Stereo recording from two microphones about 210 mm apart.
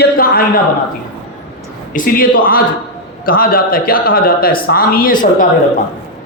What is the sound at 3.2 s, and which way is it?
A man's voice, 45° left (ahead or behind).